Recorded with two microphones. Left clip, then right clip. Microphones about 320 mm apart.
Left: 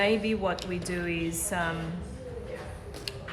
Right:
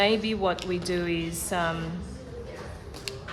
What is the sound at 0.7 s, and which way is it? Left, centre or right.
Speech, right.